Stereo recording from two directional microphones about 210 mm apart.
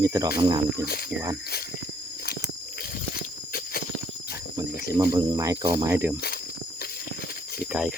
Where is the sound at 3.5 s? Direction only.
45° left (ahead or behind).